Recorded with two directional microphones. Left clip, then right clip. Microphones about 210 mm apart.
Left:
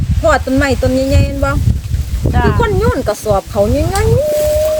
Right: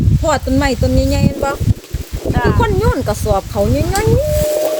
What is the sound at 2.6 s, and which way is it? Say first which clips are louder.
Speech: left 2 dB; 10° right (ahead or behind).